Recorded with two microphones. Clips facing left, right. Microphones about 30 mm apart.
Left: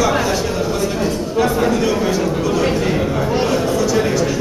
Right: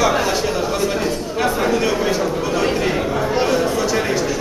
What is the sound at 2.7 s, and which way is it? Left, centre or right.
Chatter, centre.